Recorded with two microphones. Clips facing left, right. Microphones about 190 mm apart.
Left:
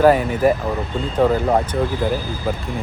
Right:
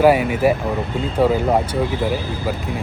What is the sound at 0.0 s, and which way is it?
Speech, 10° right (ahead or behind).